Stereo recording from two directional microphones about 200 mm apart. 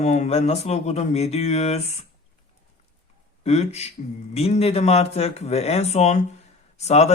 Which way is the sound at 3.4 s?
35° left (ahead or behind).